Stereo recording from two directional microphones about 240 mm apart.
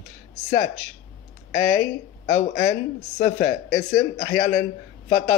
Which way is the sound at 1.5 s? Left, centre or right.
Left.